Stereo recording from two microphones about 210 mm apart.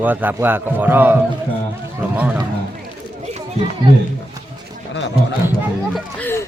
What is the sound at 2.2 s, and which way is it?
Speech, 10° right (ahead or behind).